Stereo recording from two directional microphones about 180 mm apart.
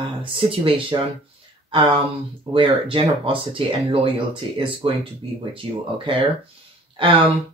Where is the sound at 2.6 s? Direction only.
30° right (ahead or behind).